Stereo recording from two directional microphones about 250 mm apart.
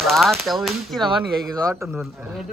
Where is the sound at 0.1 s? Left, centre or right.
Centre.